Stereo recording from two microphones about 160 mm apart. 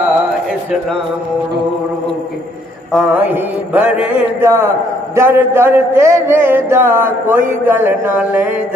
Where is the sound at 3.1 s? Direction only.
10° right (ahead or behind).